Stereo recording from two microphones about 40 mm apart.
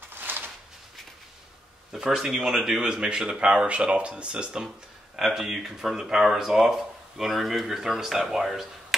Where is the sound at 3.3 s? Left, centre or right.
Right.